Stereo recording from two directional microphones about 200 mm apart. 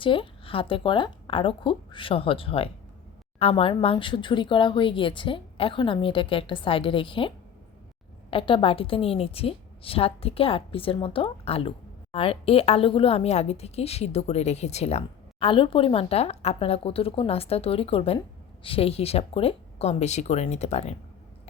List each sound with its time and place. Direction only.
0.0 s a woman's voice: 25° left (ahead or behind)